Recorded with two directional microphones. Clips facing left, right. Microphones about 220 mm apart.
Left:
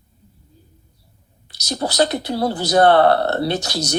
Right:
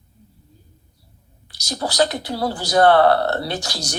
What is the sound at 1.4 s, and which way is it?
Speech, 20° left (ahead or behind).